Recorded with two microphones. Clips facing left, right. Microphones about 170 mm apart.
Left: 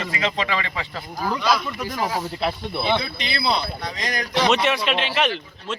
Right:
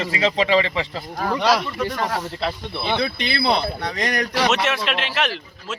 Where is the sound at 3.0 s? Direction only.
65° right (ahead or behind).